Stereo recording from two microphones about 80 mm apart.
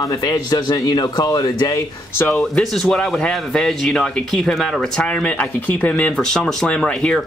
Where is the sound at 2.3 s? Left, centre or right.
Centre.